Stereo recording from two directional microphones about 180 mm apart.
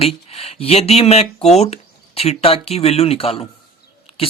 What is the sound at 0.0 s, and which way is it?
Speech, 35° left (ahead or behind).